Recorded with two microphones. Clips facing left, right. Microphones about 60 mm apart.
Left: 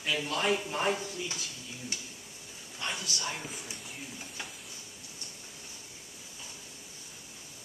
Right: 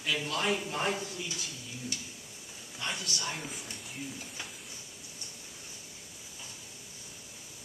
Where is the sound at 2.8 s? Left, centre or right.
Centre.